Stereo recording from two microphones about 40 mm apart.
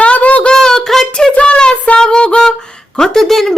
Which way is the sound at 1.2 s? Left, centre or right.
Left.